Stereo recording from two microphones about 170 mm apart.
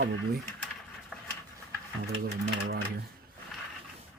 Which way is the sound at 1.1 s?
5° left (ahead or behind).